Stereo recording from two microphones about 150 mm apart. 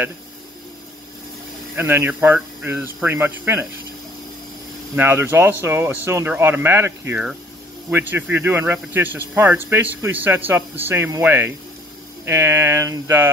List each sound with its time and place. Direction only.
1.8 s speech: 15° right (ahead or behind)
4.9 s speech: 15° right (ahead or behind)